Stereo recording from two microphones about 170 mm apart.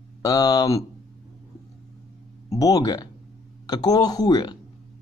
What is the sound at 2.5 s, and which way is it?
Speech, 20° left (ahead or behind).